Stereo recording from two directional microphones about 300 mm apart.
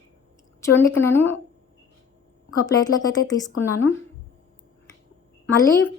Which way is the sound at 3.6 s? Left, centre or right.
Centre.